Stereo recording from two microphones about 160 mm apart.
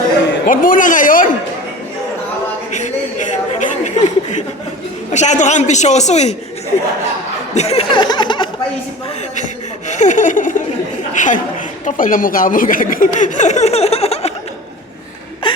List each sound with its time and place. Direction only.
0.4 s a man's voice: 60° left (ahead or behind)
2.7 s chuckle: 50° left (ahead or behind)
5.1 s speech: 45° left (ahead or behind)
7.5 s speech: 40° left (ahead or behind)
8.0 s speech: 30° left (ahead or behind)
9.9 s a woman's voice: 50° left (ahead or behind)
15.4 s a sound: 30° left (ahead or behind)